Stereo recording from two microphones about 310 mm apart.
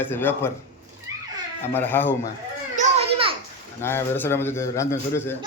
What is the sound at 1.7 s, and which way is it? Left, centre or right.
Speech, centre.